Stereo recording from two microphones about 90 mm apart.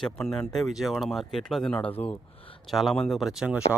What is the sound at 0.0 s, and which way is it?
Speech, 5° left (ahead or behind).